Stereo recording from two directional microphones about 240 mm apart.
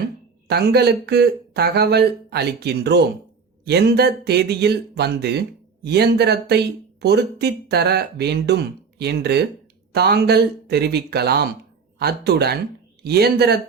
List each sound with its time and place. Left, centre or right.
0.4 s a man's voice: right